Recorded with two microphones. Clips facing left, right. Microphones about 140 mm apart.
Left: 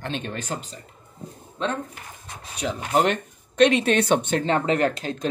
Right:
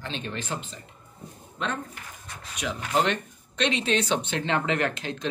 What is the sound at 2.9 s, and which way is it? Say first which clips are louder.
Speech: left 4 dB; 45° left (ahead or behind).